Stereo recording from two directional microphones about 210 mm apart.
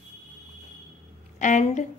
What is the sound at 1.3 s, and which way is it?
Speech, 35° left (ahead or behind).